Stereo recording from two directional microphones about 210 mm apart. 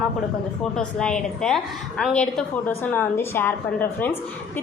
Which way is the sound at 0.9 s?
5° left (ahead or behind).